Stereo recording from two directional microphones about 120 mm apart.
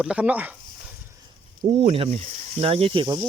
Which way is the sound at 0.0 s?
10° right (ahead or behind).